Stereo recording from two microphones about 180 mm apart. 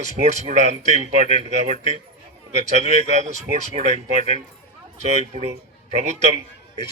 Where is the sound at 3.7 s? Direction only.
40° right (ahead or behind).